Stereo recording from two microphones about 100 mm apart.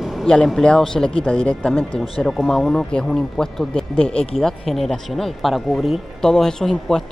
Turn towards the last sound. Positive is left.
turn(degrees=5)  # may be behind; listen again after turning